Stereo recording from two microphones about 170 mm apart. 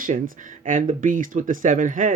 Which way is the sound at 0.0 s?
50° right (ahead or behind).